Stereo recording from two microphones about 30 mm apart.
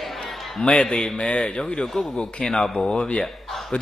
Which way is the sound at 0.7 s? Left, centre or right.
Centre.